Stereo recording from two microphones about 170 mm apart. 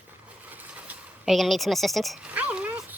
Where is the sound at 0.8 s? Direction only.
Centre (ahead or behind).